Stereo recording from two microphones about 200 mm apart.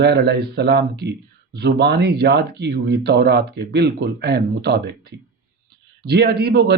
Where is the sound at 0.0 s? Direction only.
55° right (ahead or behind).